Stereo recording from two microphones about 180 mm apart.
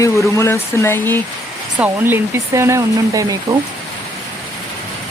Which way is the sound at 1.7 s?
10° right (ahead or behind).